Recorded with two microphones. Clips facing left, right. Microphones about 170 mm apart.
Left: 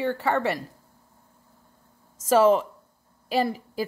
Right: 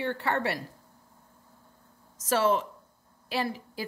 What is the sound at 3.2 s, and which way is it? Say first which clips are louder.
Speech: left 6 dB; 45° left (ahead or behind).